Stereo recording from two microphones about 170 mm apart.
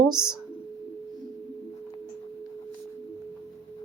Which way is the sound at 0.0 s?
25° right (ahead or behind).